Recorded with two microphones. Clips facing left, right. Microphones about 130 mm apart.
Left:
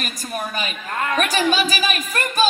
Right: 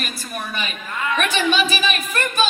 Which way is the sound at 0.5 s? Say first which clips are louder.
Left 2 dB; 40° left (ahead or behind).